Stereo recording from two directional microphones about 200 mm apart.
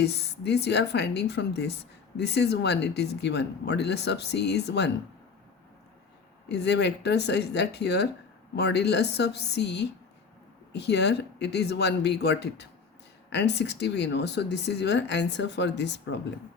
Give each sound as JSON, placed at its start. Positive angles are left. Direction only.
{"t": 0.0, "sound": "speech", "side_deg": 55}
{"t": 6.5, "sound": "speech", "side_deg": 55}